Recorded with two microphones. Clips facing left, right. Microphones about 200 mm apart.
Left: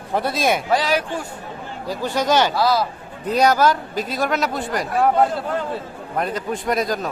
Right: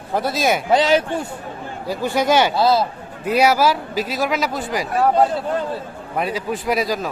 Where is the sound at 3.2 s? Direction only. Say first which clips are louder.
Right 1 dB; 10° right (ahead or behind).